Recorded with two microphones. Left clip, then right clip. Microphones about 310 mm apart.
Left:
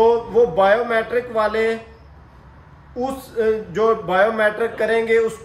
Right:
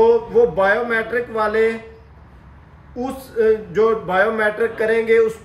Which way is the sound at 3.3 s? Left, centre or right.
Centre.